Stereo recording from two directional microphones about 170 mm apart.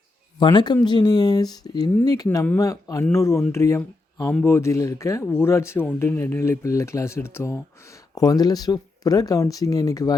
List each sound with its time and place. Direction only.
0.3 s speech: 25° left (ahead or behind)